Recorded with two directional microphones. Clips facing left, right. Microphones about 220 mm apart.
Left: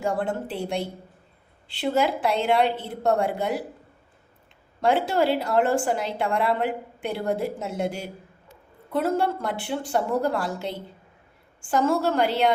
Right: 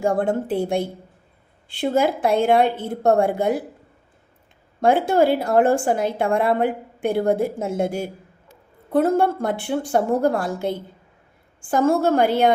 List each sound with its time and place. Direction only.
0.0 s a woman's voice: 45° right (ahead or behind)
4.8 s a woman's voice: 50° right (ahead or behind)